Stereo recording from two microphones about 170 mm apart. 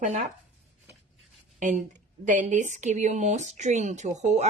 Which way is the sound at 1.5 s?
45° right (ahead or behind).